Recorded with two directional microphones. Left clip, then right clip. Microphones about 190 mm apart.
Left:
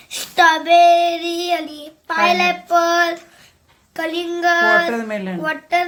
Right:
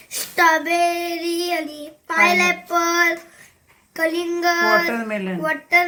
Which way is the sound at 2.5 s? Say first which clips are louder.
Left 4 dB; 20° left (ahead or behind).